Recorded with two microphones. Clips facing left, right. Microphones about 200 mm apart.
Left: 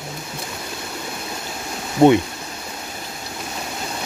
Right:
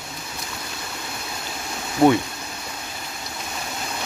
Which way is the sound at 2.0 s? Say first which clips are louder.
Left 3 dB; 25° left (ahead or behind).